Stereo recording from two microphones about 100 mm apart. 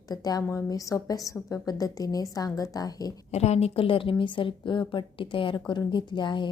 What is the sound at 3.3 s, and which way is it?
A woman's voice, 90° left.